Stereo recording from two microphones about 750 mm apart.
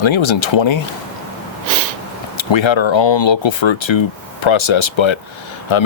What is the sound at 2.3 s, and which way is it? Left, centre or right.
Speech, left.